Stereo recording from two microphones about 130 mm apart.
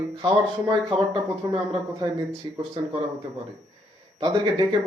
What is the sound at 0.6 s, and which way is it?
A man's voice, 40° right (ahead or behind).